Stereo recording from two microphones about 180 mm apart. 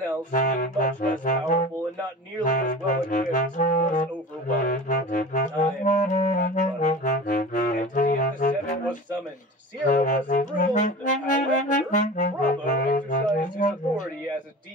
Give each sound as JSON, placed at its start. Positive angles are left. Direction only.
{"t": 0.3, "sound": "saxophone", "side_deg": 45}
{"t": 2.4, "sound": "music", "side_deg": 45}
{"t": 9.8, "sound": "brass instrument", "side_deg": 45}